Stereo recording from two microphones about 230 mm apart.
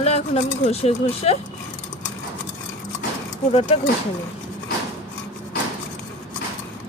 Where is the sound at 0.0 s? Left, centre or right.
Left.